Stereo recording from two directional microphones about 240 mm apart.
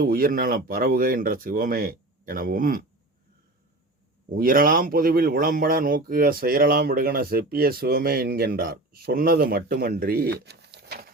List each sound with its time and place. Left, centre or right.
0.0 s speech: right
4.3 s speech: right